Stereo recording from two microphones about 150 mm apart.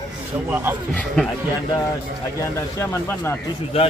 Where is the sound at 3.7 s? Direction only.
40° left (ahead or behind).